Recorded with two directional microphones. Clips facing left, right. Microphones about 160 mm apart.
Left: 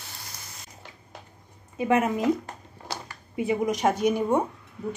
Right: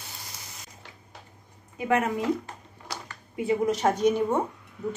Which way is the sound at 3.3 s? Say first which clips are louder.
Even; 15° left (ahead or behind).